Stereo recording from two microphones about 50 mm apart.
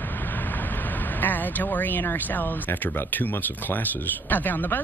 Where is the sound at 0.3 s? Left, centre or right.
Left.